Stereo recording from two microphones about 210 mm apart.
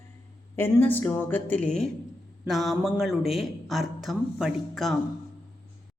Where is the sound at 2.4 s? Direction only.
Centre (ahead or behind).